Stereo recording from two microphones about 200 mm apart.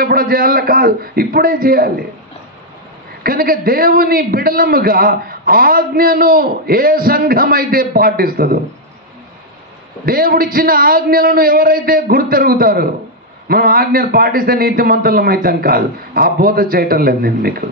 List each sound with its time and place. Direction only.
0.0 s a man's voice: 45° right (ahead or behind)
3.3 s a man's voice: 45° right (ahead or behind)
10.0 s a man's voice: 45° right (ahead or behind)